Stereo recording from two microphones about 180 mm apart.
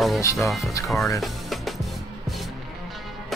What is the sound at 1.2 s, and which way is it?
Music, centre (ahead or behind).